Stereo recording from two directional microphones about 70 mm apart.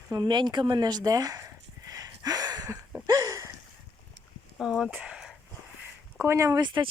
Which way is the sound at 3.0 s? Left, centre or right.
Right.